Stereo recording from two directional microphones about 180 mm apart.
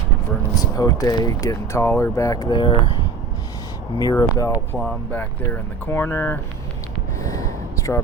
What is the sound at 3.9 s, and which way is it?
Speech, 20° left (ahead or behind).